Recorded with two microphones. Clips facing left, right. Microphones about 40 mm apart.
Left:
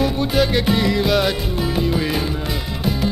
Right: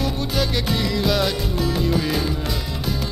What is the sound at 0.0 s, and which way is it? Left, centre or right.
Music, centre.